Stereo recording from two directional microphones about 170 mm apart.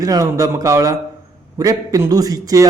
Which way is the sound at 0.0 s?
20° right (ahead or behind).